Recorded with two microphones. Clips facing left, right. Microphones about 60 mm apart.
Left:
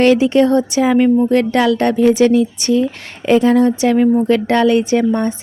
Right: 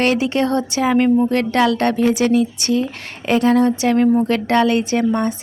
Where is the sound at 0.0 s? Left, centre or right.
Right.